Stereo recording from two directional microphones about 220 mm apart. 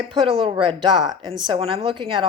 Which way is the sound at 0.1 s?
20° right (ahead or behind).